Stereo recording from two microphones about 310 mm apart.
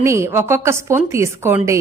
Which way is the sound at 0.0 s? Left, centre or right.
Centre.